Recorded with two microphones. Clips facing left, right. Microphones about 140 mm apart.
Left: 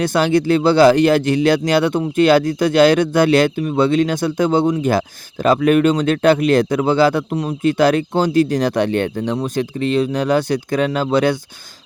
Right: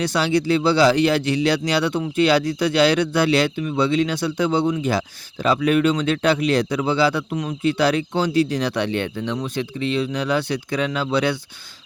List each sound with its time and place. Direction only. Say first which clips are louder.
0.0 s speech: left 4 dB; 50° left (ahead or behind)